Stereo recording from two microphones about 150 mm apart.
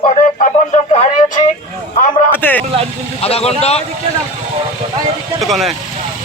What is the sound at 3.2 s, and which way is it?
Speech, 40° left (ahead or behind).